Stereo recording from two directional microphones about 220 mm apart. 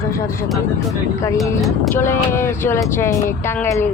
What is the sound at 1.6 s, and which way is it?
Speech, centre (ahead or behind).